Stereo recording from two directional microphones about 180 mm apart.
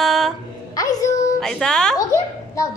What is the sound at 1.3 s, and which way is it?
Speech, 5° left (ahead or behind).